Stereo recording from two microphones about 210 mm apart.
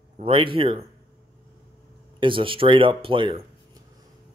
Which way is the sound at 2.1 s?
25° right (ahead or behind).